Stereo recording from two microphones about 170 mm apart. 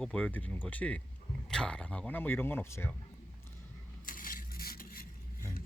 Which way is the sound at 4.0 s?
55° left (ahead or behind).